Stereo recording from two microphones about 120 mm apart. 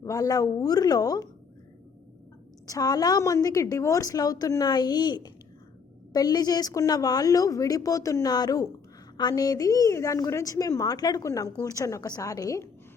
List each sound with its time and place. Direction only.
0.0 s a woman's voice: 30° left (ahead or behind)
2.6 s a woman's voice: 30° left (ahead or behind)